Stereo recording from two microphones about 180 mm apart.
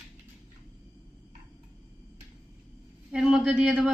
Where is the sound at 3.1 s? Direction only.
5° right (ahead or behind).